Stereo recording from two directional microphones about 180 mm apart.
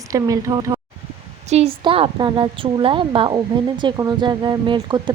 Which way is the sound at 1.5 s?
35° right (ahead or behind).